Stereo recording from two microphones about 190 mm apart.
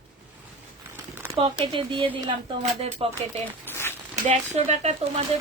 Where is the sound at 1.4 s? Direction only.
25° right (ahead or behind).